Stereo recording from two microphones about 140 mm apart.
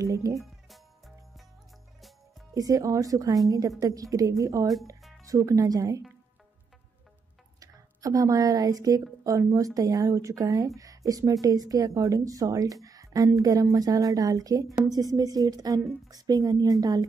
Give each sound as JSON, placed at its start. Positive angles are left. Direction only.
{"t": 0.0, "sound": "speech", "side_deg": -25}
{"t": 0.4, "sound": "music", "side_deg": 0}
{"t": 2.5, "sound": "a woman's voice", "side_deg": -25}
{"t": 7.6, "sound": "a woman's voice", "side_deg": -25}